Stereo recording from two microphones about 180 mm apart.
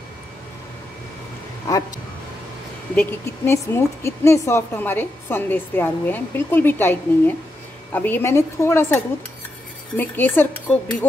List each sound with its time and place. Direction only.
3.0 s speech: 15° left (ahead or behind)